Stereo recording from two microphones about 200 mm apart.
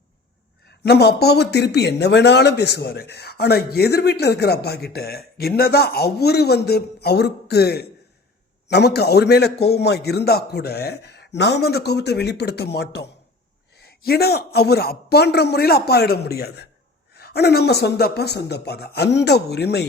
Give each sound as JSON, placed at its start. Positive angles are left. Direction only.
{"t": 0.9, "sound": "a man's voice", "side_deg": 55}